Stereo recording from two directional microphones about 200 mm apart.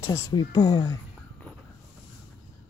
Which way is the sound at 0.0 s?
15° left (ahead or behind).